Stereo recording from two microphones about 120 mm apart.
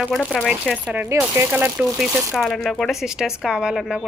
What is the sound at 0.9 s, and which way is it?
Speech, 15° right (ahead or behind).